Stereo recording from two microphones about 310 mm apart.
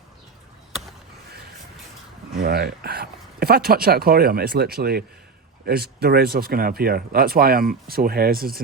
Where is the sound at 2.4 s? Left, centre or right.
Right.